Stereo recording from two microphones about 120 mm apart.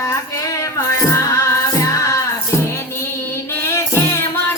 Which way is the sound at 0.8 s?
25° left (ahead or behind).